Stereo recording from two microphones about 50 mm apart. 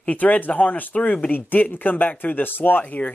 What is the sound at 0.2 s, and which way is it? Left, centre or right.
Speech, left.